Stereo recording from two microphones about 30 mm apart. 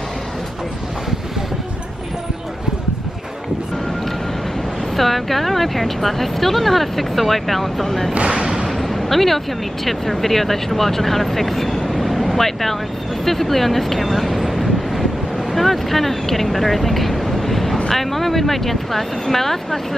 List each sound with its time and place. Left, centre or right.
4.9 s speech: centre
8.1 s speech: right
8.8 s a sound: centre
9.8 s speech: centre
14.0 s vehicle: centre
15.5 s speech: centre